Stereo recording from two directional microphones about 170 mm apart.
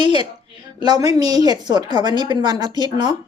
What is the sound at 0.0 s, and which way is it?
A woman's voice, 25° right (ahead or behind).